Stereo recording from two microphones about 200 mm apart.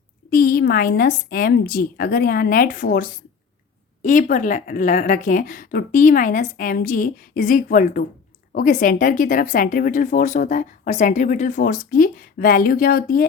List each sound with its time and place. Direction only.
0.3 s speech: 50° left (ahead or behind)